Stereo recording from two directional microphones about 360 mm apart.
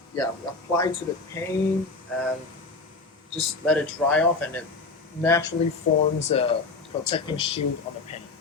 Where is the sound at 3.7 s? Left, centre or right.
Centre.